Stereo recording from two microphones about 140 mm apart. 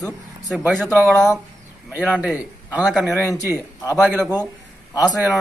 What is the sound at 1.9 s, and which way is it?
Speech, 10° right (ahead or behind).